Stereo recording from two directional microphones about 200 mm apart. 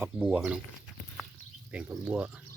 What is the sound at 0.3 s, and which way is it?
Speech, 5° right (ahead or behind).